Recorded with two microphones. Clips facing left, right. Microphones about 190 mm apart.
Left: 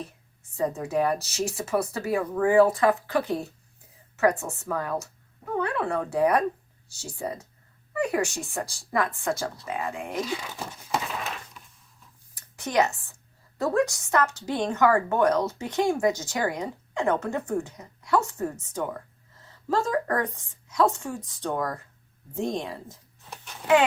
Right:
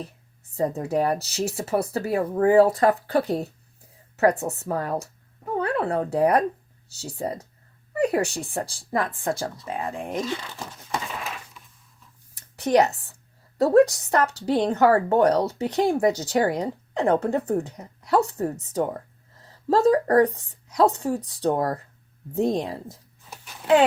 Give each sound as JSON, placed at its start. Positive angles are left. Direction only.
{"t": 0.5, "sound": "speech", "side_deg": -35}
{"t": 6.8, "sound": "speech", "side_deg": -65}
{"t": 7.2, "sound": "speech", "side_deg": -35}
{"t": 10.1, "sound": "speech", "side_deg": 5}
{"t": 11.2, "sound": "a sound", "side_deg": -5}
{"t": 12.5, "sound": "a woman's voice", "side_deg": -35}
{"t": 23.6, "sound": "speech", "side_deg": 0}